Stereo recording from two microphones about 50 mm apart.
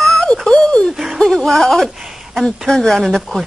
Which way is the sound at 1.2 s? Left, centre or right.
Centre.